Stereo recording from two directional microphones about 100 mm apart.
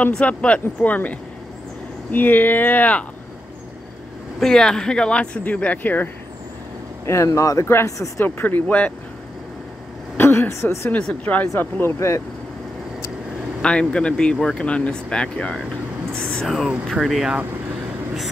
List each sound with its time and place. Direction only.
0.0 s speech: 15° left (ahead or behind)
4.4 s speech: 5° left (ahead or behind)
7.1 s speech: 30° left (ahead or behind); by 8.9 s 15° left (ahead or behind)
10.1 s speech: 20° left (ahead or behind)
10.9 s speech: 10° left (ahead or behind)
11.6 s speech: 25° left (ahead or behind)
13.6 s speech: 10° left (ahead or behind)